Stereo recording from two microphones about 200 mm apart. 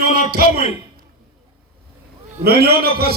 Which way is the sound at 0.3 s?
50° right (ahead or behind).